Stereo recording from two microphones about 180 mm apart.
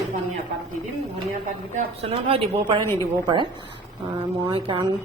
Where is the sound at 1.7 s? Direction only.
35° right (ahead or behind).